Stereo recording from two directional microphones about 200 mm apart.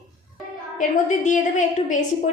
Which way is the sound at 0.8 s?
40° left (ahead or behind).